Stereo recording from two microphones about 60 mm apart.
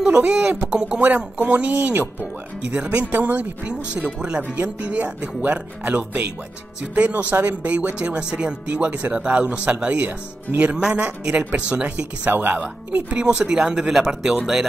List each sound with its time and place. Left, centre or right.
0.0 s speech: centre
1.0 s speech: right
7.4 s speech: right
12.3 s speech: right
13.1 s speech: centre